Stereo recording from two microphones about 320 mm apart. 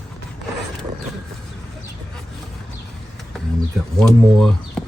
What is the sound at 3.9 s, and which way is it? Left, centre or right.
Speech, centre.